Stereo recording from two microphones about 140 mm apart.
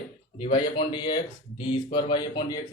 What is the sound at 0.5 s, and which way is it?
Speech, 35° left (ahead or behind).